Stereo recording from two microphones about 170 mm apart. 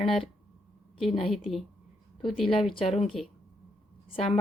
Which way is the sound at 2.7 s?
35° left (ahead or behind).